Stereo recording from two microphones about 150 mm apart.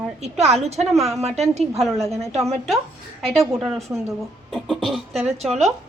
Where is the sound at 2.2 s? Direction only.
45° right (ahead or behind).